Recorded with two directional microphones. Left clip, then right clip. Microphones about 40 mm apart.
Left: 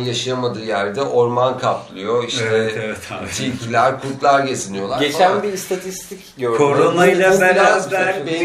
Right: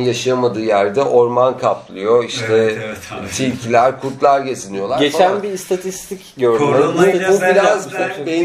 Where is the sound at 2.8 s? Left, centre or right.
Left.